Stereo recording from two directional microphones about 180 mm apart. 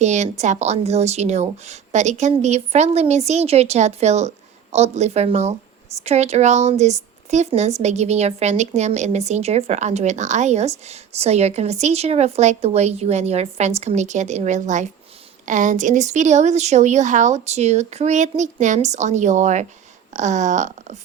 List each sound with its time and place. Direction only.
0.0 s speech: 40° right (ahead or behind)